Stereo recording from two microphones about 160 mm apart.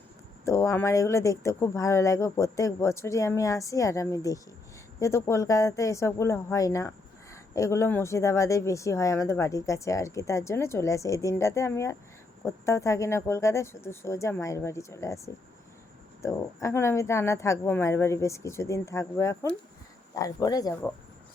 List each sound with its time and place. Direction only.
0.4 s a woman's voice: 20° left (ahead or behind)